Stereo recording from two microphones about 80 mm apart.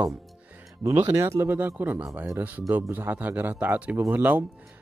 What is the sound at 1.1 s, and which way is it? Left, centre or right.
A man's voice, right.